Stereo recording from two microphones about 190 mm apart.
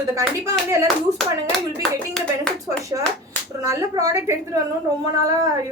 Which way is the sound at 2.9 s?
15° right (ahead or behind).